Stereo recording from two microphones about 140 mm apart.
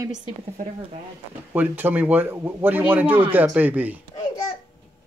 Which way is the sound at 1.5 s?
15° right (ahead or behind).